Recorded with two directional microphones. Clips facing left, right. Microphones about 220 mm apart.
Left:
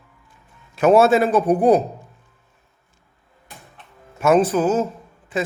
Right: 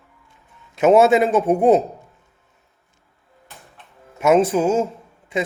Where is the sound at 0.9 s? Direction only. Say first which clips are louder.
Even; 20° right (ahead or behind).